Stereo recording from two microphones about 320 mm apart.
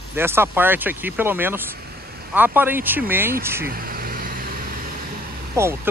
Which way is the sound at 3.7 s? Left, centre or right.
Right.